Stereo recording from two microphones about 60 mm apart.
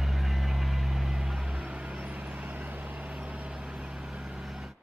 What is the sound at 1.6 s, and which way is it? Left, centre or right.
Vehicle, centre.